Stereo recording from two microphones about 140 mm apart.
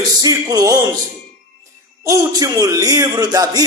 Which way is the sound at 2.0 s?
25° right (ahead or behind).